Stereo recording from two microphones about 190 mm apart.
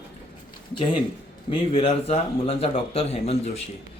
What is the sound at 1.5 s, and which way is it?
Speech, 30° left (ahead or behind).